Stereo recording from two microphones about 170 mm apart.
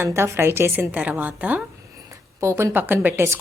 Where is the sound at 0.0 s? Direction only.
15° right (ahead or behind).